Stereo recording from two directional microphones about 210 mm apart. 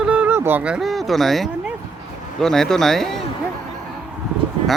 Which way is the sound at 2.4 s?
Centre (ahead or behind).